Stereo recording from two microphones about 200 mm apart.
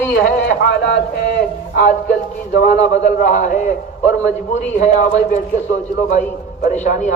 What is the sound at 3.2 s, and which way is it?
A man's voice, 40° left (ahead or behind).